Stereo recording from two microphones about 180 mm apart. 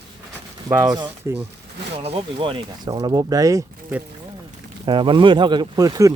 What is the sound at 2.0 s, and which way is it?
Speech, 30° right (ahead or behind).